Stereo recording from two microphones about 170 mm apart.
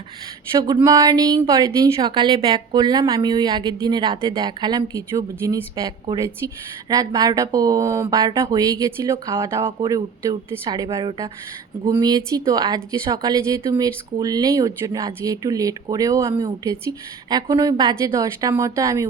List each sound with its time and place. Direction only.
0.9 s a woman's voice: 20° right (ahead or behind)